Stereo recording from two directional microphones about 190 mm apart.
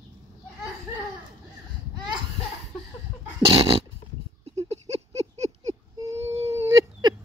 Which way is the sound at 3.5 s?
30° right (ahead or behind).